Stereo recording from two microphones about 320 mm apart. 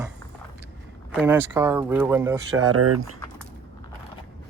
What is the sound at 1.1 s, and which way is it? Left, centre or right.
Speech, centre.